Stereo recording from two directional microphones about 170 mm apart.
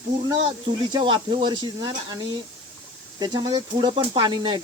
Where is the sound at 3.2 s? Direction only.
25° right (ahead or behind).